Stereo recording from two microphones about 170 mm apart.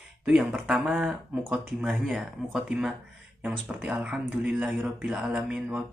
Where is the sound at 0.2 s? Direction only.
5° right (ahead or behind).